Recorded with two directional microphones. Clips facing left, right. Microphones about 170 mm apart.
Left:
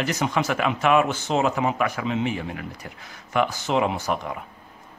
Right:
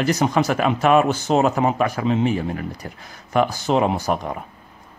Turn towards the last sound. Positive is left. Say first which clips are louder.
# right 4 dB
turn(degrees=-40)  # may be behind; listen again after turning